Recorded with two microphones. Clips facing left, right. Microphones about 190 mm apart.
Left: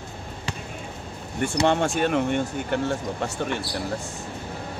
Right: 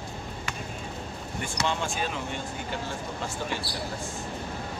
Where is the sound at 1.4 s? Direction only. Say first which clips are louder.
Left 9 dB; 60° left (ahead or behind).